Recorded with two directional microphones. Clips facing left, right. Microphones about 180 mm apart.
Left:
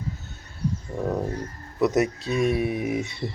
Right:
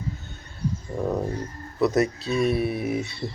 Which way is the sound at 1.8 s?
15° left (ahead or behind).